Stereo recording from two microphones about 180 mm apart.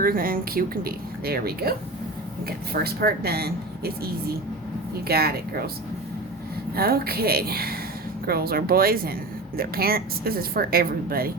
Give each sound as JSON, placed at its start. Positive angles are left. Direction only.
{"t": 0.0, "sound": "speech", "side_deg": -55}
{"t": 6.7, "sound": "speech", "side_deg": -60}